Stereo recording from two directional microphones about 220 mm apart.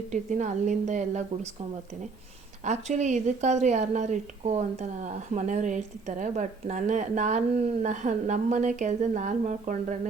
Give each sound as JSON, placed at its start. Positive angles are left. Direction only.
{"t": 0.1, "sound": "a woman's voice", "side_deg": -35}
{"t": 2.6, "sound": "a woman's voice", "side_deg": -35}